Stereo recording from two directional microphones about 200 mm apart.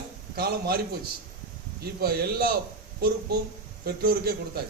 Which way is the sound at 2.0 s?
50° right (ahead or behind).